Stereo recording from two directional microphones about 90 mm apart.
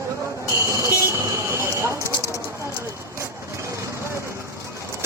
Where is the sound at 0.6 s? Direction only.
30° right (ahead or behind).